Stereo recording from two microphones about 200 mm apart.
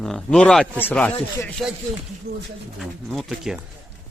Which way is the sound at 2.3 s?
50° right (ahead or behind).